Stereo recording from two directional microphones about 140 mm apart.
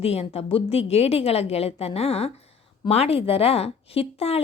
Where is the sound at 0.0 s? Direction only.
45° left (ahead or behind).